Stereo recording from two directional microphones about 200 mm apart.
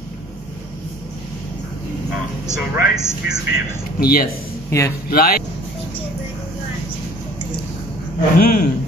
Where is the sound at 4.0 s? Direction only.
50° left (ahead or behind).